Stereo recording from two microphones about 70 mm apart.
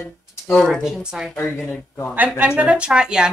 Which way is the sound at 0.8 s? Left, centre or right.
Centre.